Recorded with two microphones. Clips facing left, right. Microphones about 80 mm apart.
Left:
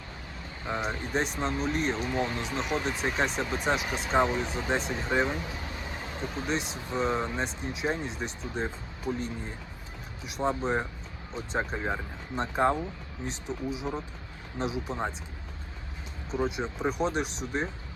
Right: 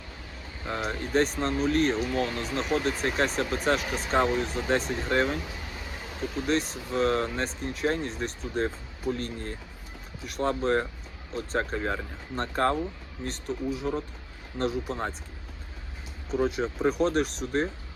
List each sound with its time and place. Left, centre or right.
0.6 s speech: centre
2.0 s speech: left
2.3 s speech: centre
5.4 s a sound: left
6.5 s speech: centre
16.3 s speech: centre